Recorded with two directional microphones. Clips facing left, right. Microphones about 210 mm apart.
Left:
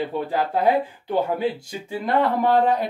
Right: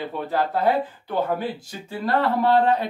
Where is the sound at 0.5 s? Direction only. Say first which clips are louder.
Left 3 dB; 15° left (ahead or behind).